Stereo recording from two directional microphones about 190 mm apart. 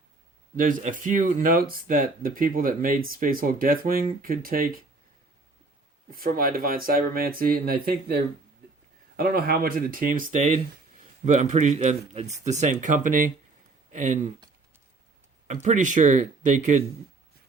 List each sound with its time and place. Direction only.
0.5 s speech: 45° right (ahead or behind)
6.1 s speech: 50° right (ahead or behind)
15.4 s speech: 40° right (ahead or behind)